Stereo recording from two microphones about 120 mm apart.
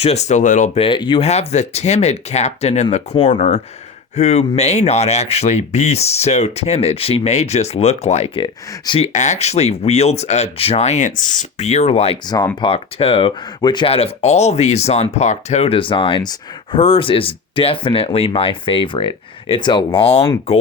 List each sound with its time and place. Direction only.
0.0 s speech: 65° left (ahead or behind); by 0.7 s 90° left
0.8 s speech: 45° left (ahead or behind)
1.3 s speech: 65° left (ahead or behind)
9.0 s speech: 75° left (ahead or behind); by 13.3 s 55° left (ahead or behind)
13.6 s speech: 35° left (ahead or behind)
13.8 s speech: 55° left (ahead or behind)